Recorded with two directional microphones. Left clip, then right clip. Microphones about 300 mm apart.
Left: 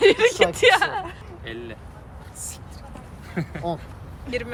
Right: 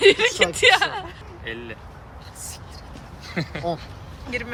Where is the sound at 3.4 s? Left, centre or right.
Centre.